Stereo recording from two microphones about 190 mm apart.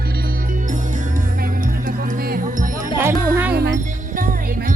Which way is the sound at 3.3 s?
10° right (ahead or behind).